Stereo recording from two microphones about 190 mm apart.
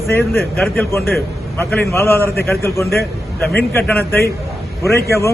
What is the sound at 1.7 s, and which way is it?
Speech, 10° left (ahead or behind).